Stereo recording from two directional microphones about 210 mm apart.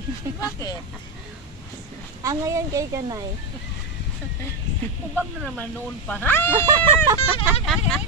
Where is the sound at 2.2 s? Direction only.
15° right (ahead or behind).